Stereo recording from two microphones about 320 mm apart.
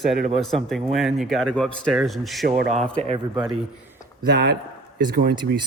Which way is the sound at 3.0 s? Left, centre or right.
Centre.